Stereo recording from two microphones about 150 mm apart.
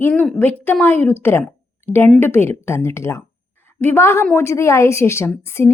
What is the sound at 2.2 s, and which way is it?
A woman's voice, 15° left (ahead or behind).